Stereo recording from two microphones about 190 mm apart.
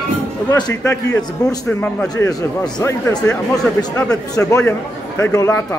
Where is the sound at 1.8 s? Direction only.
10° left (ahead or behind).